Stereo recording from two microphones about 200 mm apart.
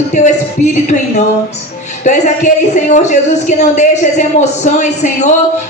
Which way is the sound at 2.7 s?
35° left (ahead or behind).